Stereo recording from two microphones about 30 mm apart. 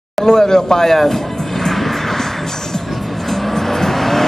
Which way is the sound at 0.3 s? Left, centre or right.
Left.